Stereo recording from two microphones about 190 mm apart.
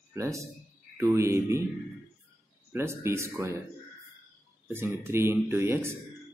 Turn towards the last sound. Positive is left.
turn(degrees=-15)  # may be behind; listen again after turning